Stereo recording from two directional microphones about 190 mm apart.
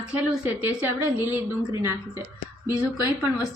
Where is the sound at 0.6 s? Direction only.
10° right (ahead or behind).